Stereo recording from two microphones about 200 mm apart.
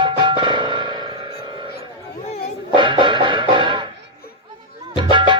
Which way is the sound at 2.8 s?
25° right (ahead or behind).